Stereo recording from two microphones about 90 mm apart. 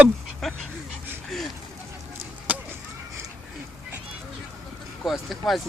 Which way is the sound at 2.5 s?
15° right (ahead or behind).